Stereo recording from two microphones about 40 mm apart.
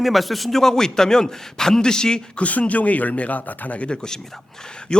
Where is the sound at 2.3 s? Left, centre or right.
Left.